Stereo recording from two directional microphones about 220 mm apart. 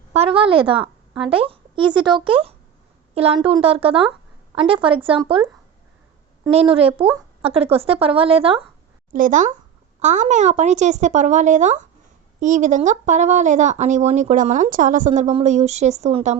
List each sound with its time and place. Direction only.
0.1 s a woman's voice: 25° right (ahead or behind)
9.1 s speech: 35° right (ahead or behind)